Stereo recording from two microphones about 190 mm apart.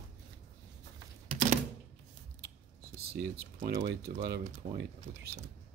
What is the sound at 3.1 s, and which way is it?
Typing, 45° right (ahead or behind).